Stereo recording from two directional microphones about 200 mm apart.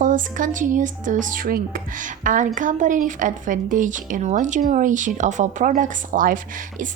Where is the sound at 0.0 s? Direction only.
40° right (ahead or behind).